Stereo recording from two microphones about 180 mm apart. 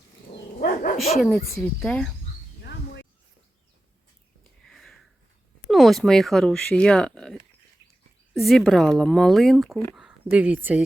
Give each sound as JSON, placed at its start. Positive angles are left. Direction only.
{"t": 0.6, "sound": "dog", "side_deg": 50}
{"t": 1.5, "sound": "speech", "side_deg": 5}
{"t": 2.6, "sound": "a sound", "side_deg": 75}
{"t": 4.6, "sound": "sniff", "side_deg": 5}
{"t": 5.6, "sound": "speech", "side_deg": 0}